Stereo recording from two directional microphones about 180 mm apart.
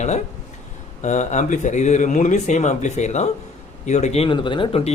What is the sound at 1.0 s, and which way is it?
Speech, 40° left (ahead or behind).